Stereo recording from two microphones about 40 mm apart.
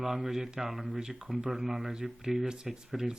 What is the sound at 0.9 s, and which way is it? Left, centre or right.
Speech, centre.